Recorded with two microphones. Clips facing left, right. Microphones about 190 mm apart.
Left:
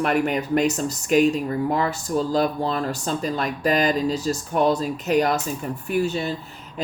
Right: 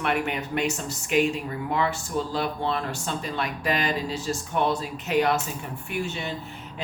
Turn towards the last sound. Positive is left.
turn(degrees=35)  # may be behind; listen again after turning